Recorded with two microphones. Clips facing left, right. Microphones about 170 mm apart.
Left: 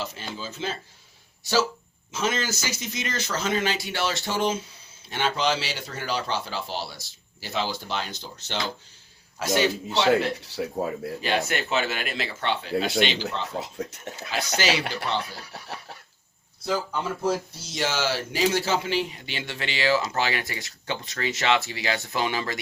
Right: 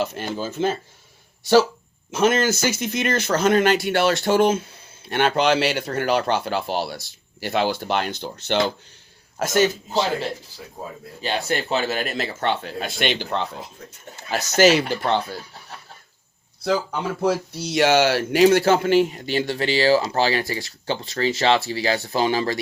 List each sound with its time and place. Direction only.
0.0 s speech: 55° right (ahead or behind)
2.1 s speech: 55° right (ahead or behind)
9.4 s speech: 45° right (ahead or behind)
9.9 s a man's voice: 75° left (ahead or behind)
11.2 s speech: 35° right (ahead or behind); by 13.2 s 55° right (ahead or behind)
13.6 s speech: 85° left
14.3 s speech: 45° right (ahead or behind)
15.5 s speech: 75° left (ahead or behind)
17.2 s speech: 70° right (ahead or behind); by 22.6 s 35° right (ahead or behind)